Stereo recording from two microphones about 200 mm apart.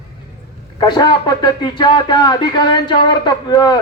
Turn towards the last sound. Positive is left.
turn(degrees=20)  # may be behind; listen again after turning